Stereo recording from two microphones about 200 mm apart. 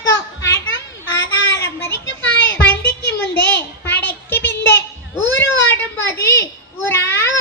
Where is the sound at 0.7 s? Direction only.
65° left (ahead or behind).